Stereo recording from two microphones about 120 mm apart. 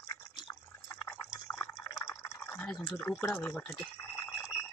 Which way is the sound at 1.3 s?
30° left (ahead or behind).